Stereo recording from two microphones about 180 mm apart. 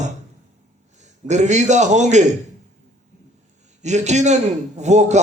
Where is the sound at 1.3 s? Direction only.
40° right (ahead or behind).